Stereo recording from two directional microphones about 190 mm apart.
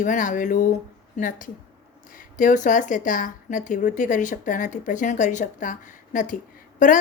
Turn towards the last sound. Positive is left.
turn(degrees=45)  # may be behind; listen again after turning